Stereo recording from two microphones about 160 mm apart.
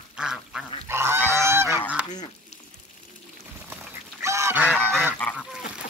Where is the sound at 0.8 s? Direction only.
15° right (ahead or behind).